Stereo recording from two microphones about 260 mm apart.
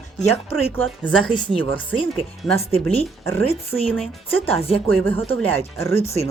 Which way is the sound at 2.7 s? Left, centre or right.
Left.